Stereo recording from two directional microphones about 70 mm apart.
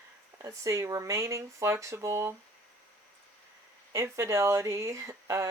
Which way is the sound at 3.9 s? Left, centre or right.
Right.